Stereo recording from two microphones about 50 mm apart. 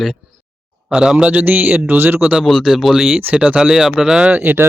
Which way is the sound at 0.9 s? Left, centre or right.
Centre.